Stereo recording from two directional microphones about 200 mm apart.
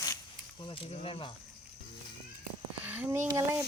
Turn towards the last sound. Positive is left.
turn(degrees=-15)  # may be behind; listen again after turning